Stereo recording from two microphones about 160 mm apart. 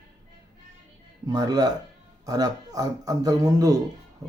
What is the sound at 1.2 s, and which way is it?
Speech, 25° right (ahead or behind).